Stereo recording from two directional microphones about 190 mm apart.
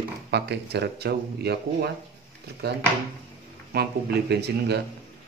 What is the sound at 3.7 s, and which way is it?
Speech, 60° right (ahead or behind).